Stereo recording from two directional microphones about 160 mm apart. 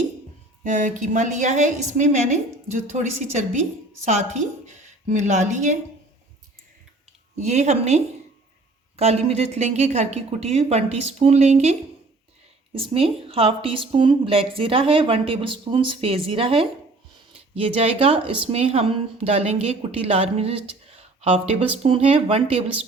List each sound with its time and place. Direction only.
0.6 s a woman's voice: 50° right (ahead or behind)
7.3 s a woman's voice: 45° right (ahead or behind)